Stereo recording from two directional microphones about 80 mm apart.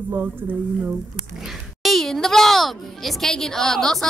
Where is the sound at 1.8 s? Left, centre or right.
Centre.